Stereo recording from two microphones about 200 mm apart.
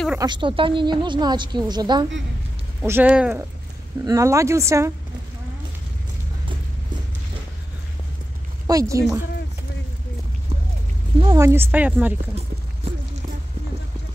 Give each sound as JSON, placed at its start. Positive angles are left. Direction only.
{"t": 0.2, "sound": "speech", "side_deg": -25}
{"t": 2.8, "sound": "speech", "side_deg": -10}
{"t": 8.6, "sound": "speech", "side_deg": -15}
{"t": 11.1, "sound": "speech", "side_deg": -25}
{"t": 11.4, "sound": "speech", "side_deg": -10}